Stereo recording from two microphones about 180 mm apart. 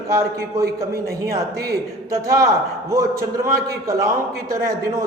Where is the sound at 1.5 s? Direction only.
60° right (ahead or behind).